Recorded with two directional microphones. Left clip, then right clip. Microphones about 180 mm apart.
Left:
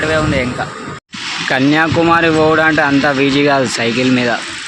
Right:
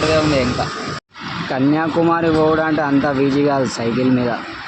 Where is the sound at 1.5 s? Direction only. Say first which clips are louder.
Left 4 dB; 10° left (ahead or behind).